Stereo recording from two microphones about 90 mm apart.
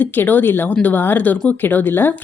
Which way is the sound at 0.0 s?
20° left (ahead or behind).